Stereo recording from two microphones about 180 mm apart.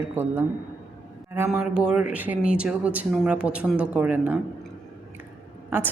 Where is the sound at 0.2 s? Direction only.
15° right (ahead or behind).